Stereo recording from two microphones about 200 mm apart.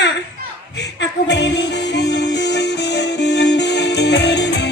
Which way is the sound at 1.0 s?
60° left (ahead or behind).